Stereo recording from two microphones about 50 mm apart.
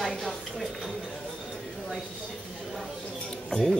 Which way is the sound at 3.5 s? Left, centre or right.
Centre.